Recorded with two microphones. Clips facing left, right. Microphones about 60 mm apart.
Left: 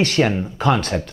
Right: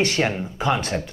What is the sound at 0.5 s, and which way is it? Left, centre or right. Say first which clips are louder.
Speech: left 3 dB; centre.